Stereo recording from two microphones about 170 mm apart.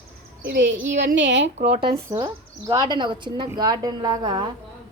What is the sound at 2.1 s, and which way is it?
Speech, 25° right (ahead or behind).